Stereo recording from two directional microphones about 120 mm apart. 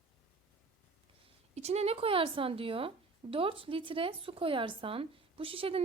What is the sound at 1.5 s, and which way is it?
A woman's voice, 65° right (ahead or behind).